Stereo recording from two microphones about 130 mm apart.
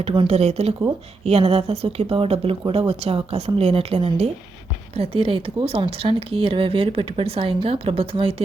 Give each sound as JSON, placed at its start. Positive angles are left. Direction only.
{"t": 0.3, "sound": "speech", "side_deg": -55}